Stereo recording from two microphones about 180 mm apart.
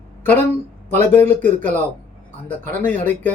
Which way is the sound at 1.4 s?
45° right (ahead or behind).